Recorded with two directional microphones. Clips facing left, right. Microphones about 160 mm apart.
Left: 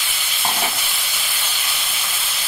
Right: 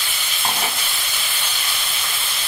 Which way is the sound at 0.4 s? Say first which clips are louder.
Left 1 dB; 5° left (ahead or behind).